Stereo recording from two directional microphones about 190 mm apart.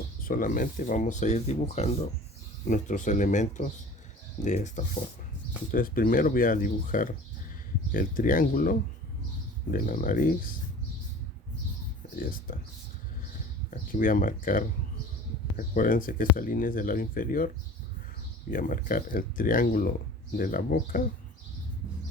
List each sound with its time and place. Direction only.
0.3 s speech: 45° left (ahead or behind)
9.7 s speech: 45° left (ahead or behind)
12.1 s speech: 45° left (ahead or behind)
13.7 s speech: 45° left (ahead or behind)
18.5 s speech: 45° left (ahead or behind)